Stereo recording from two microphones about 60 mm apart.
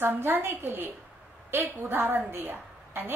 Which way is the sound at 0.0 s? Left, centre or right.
Right.